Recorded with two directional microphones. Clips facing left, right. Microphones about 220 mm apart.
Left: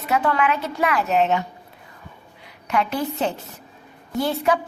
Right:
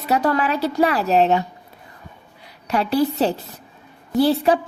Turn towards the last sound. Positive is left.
turn(degrees=-35)  # may be behind; listen again after turning